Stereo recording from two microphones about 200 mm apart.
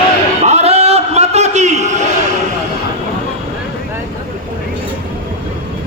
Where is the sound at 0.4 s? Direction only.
30° right (ahead or behind).